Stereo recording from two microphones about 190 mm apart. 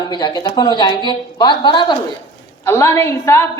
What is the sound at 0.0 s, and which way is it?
A woman's voice, 25° left (ahead or behind).